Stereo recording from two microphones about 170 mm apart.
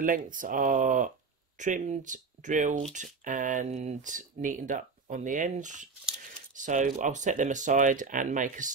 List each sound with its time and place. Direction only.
0.0 s speech: 50° right (ahead or behind)